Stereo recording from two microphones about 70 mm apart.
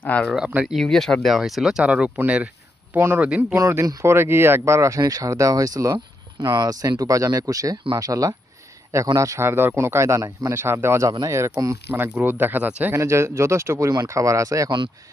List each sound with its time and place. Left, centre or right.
0.0 s speech: left
0.3 s speech: centre
0.8 s speech: centre
1.8 s speech: centre
2.9 s speech: right
3.2 s speech: centre
4.0 s speech: right
6.4 s speech: right
9.4 s speech: right
11.0 s speech: right
11.9 s speech: right
12.9 s speech: right